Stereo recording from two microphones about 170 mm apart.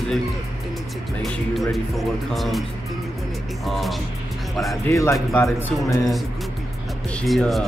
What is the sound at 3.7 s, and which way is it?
Speech, centre (ahead or behind).